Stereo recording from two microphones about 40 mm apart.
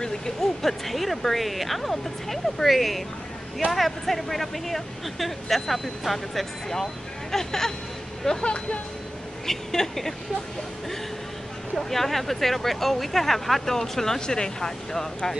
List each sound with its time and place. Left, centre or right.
0.0 s speech: centre
11.7 s speech: centre